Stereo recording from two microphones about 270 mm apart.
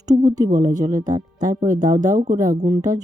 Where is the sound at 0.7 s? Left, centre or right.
Centre.